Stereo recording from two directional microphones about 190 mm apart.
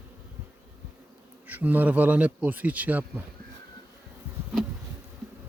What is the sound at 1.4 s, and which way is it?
Speech, 10° right (ahead or behind).